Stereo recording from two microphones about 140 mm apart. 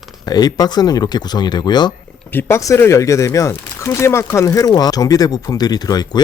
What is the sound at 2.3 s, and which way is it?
Speech, 15° left (ahead or behind).